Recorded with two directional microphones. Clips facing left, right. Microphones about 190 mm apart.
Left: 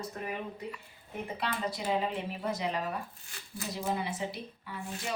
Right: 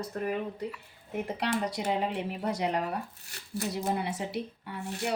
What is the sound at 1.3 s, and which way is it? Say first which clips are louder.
A woman's voice: right 3 dB; 70° right (ahead or behind).